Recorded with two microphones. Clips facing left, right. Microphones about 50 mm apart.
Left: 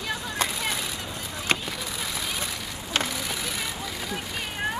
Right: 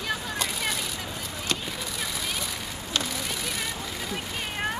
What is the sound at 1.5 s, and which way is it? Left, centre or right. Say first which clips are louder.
Vehicle: left 5 dB; left.